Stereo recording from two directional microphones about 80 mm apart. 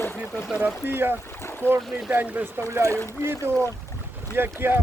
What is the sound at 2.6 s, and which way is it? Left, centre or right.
Speech, right.